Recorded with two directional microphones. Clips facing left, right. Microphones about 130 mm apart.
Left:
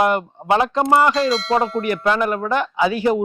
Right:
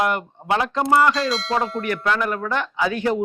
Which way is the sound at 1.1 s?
Centre (ahead or behind).